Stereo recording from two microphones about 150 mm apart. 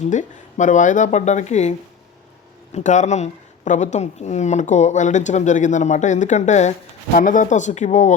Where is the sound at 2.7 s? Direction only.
55° left (ahead or behind).